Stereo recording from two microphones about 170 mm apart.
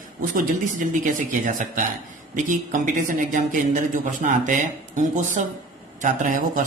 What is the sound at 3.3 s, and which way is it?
Speech, 50° right (ahead or behind).